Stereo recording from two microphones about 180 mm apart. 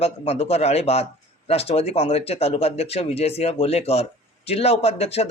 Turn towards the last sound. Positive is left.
turn(degrees=35)  # may be behind; listen again after turning